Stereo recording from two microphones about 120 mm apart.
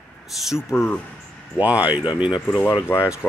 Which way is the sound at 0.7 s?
25° left (ahead or behind).